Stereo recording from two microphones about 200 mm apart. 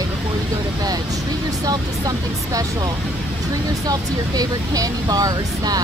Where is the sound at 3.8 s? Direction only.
20° right (ahead or behind).